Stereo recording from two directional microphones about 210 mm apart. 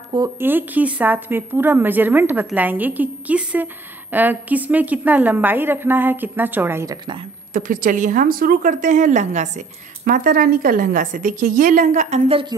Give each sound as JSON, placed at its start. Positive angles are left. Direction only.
{"t": 0.1, "sound": "speech", "side_deg": -15}
{"t": 7.5, "sound": "speech", "side_deg": -40}